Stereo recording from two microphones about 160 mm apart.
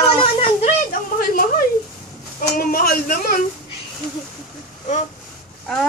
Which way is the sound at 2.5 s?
65° left (ahead or behind).